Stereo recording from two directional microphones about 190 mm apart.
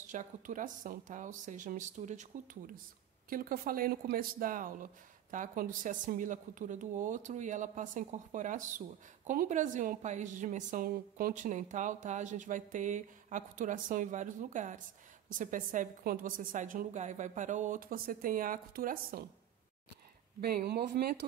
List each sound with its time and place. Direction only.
0.0 s a woman's voice: 40° right (ahead or behind)
20.3 s speech: 55° right (ahead or behind)